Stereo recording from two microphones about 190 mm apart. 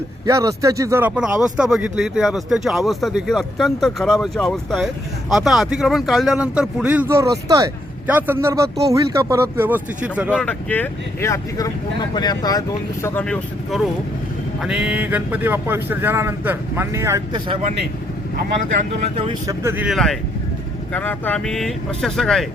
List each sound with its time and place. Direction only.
0.3 s speech: 15° right (ahead or behind)
10.3 s speech: 5° left (ahead or behind)
13.1 s speech: 5° left (ahead or behind); by 17.6 s 20° right (ahead or behind)
19.1 s speech: 30° right (ahead or behind)
19.5 s speech: 10° right (ahead or behind)
20.9 s speech: 10° left (ahead or behind)